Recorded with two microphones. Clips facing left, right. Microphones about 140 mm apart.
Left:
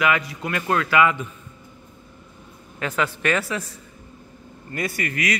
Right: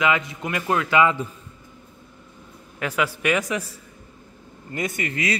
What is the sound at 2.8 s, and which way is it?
Speech, 10° right (ahead or behind).